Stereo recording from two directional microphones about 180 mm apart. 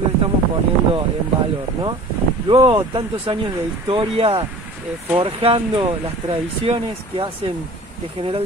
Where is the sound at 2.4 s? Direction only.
25° right (ahead or behind).